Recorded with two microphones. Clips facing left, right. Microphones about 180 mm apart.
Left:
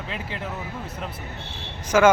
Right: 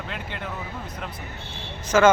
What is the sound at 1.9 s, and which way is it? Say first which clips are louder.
Speech: even; 10° left (ahead or behind).